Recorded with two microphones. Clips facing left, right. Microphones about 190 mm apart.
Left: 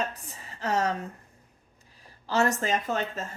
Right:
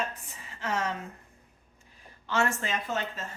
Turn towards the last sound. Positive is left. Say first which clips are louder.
# left 4 dB
turn(degrees=45)  # may be behind; listen again after turning